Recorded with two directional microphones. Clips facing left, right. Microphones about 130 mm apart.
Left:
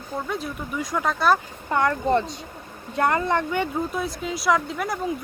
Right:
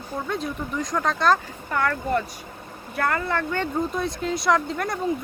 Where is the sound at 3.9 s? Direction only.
Centre (ahead or behind).